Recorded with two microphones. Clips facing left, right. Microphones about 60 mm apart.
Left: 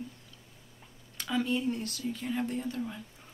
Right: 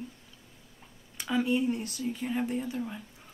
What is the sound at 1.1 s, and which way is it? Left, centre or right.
Speech, centre.